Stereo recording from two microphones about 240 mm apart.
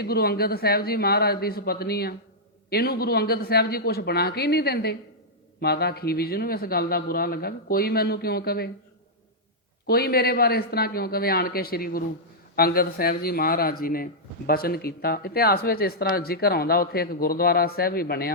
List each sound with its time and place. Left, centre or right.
0.0 s speech: left
9.8 s speech: left